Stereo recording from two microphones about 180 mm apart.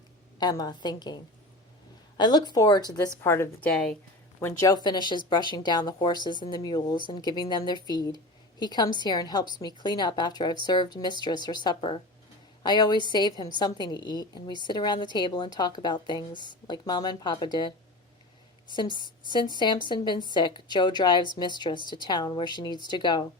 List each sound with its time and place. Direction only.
0.3 s a woman's voice: 20° left (ahead or behind)
3.7 s speech: 5° left (ahead or behind)
4.4 s a woman's voice: 15° left (ahead or behind)
18.8 s a woman's voice: 25° left (ahead or behind)